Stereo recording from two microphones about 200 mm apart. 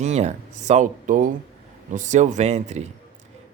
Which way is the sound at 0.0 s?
35° right (ahead or behind).